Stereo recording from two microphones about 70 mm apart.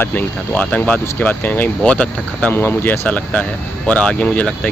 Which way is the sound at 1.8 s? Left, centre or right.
Centre.